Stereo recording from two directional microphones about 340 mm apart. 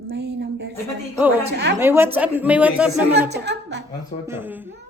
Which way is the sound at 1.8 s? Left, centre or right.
Centre.